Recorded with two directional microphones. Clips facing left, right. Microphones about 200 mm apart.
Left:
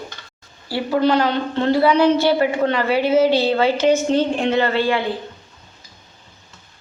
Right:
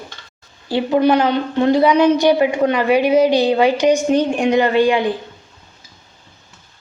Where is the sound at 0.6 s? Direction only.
20° right (ahead or behind).